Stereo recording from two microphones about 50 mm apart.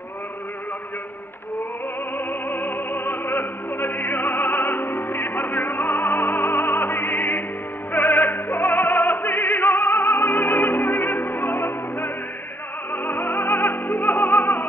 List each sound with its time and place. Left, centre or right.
2.1 s music: left
7.9 s opera: left
12.9 s music: left